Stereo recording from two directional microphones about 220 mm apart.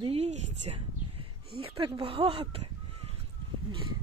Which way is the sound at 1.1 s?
25° right (ahead or behind).